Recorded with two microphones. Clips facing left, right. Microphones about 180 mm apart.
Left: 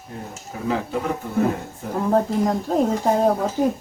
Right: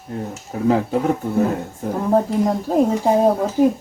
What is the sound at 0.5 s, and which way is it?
Speech, 40° right (ahead or behind).